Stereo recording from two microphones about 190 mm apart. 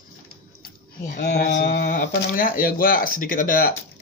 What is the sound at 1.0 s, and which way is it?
Speech, 50° left (ahead or behind).